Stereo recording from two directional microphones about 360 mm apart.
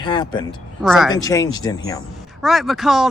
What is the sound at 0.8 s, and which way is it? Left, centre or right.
Speech, centre.